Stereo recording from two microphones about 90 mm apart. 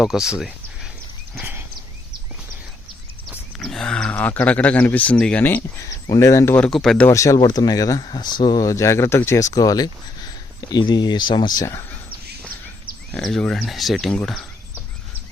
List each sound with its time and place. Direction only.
0.0 s speech: 5° right (ahead or behind)
3.2 s speech: 5° left (ahead or behind)
6.1 s speech: 35° left (ahead or behind)
6.7 s speech: 5° left (ahead or behind)
7.1 s speech: 35° left (ahead or behind)
7.4 s speech: 45° left (ahead or behind)
8.0 s speech: 55° left (ahead or behind)
8.6 s speech: 35° left (ahead or behind); by 11.6 s 55° left (ahead or behind)
13.2 s speech: 5° left (ahead or behind)